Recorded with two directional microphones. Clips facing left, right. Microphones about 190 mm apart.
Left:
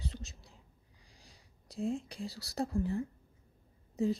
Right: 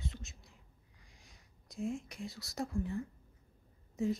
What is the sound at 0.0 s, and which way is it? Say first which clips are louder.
Whispering: left 2 dB; 35° left (ahead or behind).